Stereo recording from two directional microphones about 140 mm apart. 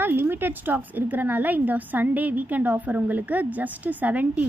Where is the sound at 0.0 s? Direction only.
15° right (ahead or behind).